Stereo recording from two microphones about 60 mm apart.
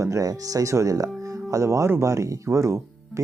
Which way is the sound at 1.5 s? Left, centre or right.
Right.